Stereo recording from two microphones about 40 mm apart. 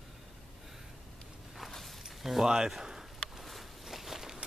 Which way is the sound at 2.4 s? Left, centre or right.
Centre.